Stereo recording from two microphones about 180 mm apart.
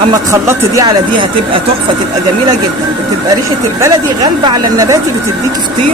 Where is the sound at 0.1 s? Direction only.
15° right (ahead or behind).